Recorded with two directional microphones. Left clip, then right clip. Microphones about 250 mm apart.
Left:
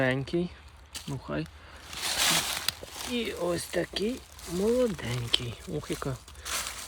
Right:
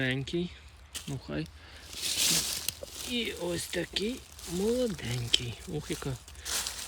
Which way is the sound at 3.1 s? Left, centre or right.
Centre.